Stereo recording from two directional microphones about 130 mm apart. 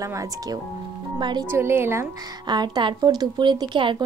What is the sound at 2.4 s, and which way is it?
A woman's voice, 35° right (ahead or behind).